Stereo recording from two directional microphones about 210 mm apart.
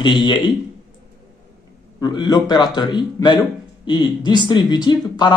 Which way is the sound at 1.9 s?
20° left (ahead or behind).